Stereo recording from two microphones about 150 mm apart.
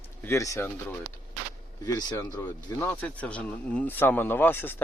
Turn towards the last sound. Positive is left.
turn(degrees=15)  # may be behind; listen again after turning